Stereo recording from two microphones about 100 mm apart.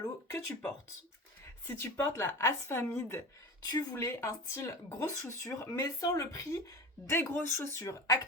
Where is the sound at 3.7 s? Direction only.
40° left (ahead or behind).